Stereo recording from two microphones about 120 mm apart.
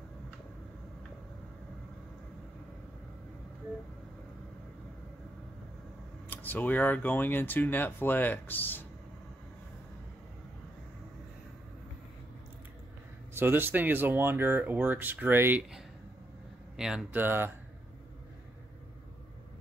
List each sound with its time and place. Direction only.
6.3 s speech: 15° left (ahead or behind)
13.3 s speech: 20° right (ahead or behind)
16.7 s speech: 5° right (ahead or behind)
17.2 s speech: 20° right (ahead or behind)